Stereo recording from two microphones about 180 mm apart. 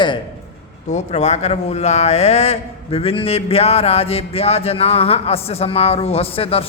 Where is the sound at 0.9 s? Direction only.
40° left (ahead or behind).